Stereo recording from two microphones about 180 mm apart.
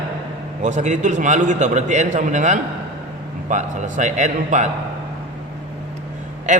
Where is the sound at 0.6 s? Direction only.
40° right (ahead or behind).